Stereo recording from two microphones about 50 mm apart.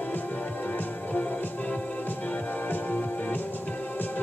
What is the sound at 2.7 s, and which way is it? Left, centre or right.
Music, left.